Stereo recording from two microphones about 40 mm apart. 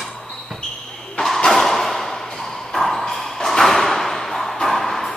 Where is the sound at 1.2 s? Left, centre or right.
Centre.